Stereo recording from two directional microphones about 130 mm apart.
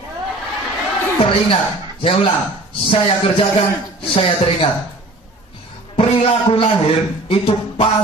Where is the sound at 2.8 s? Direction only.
45° left (ahead or behind).